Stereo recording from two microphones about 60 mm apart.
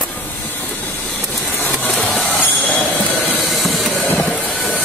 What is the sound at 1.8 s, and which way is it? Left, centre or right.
Vehicle, left.